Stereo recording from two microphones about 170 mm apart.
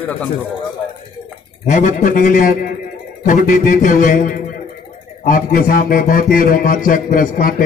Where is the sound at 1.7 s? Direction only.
45° left (ahead or behind).